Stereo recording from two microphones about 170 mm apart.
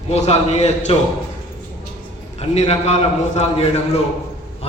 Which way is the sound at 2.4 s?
40° left (ahead or behind).